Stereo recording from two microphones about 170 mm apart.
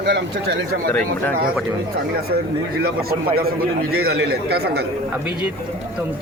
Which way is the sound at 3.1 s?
65° right (ahead or behind).